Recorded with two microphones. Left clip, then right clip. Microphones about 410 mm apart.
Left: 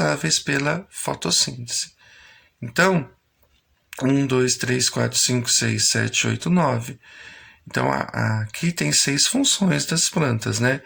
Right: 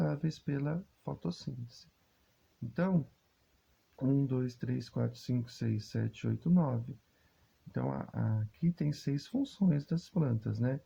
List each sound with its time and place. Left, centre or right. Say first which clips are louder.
0.0 s speech: left 17 dB; right
3.9 s speech: left 14 dB; right